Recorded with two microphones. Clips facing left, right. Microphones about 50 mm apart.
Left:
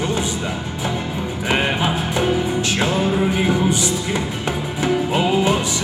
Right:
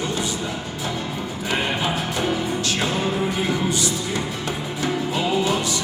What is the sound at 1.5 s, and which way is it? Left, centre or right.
Speech, left.